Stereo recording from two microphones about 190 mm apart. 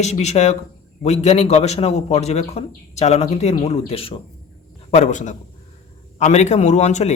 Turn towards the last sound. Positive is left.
turn(degrees=35)  # may be behind; listen again after turning